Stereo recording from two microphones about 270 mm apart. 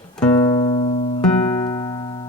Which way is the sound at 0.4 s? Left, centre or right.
Centre.